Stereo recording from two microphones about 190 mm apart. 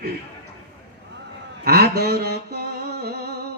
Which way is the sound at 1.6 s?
55° right (ahead or behind).